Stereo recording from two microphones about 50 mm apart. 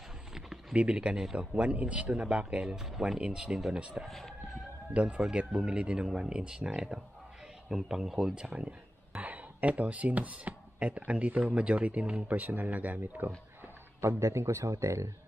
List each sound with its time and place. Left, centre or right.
0.3 s a sound: centre
0.7 s speech: right
2.2 s speech: centre
4.0 s speech: centre
4.9 s speech: right
8.5 s a man's voice: right
14.0 s speech: right